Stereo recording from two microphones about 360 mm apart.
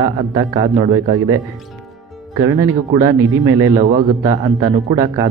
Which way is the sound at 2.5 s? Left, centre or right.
Centre.